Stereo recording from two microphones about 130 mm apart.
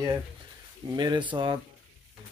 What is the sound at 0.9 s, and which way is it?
Speech, 35° right (ahead or behind).